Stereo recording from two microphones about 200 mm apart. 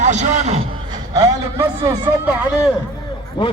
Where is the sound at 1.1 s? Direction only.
15° right (ahead or behind).